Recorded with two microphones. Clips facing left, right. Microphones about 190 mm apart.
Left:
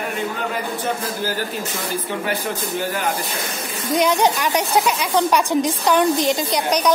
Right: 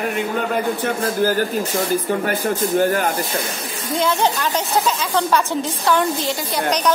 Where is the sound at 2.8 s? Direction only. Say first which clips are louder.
Right 7 dB; 50° right (ahead or behind).